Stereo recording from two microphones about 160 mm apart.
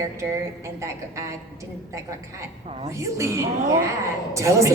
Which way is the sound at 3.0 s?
20° right (ahead or behind).